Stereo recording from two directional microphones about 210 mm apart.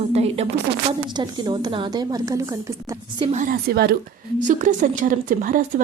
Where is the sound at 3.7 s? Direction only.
50° right (ahead or behind).